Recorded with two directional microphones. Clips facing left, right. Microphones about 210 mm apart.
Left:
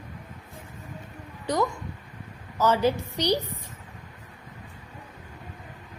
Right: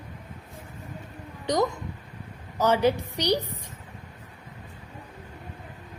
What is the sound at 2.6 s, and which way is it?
Speech, 15° right (ahead or behind).